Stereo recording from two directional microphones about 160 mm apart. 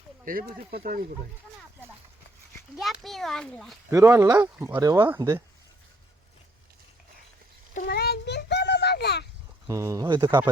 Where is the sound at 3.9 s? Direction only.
20° right (ahead or behind).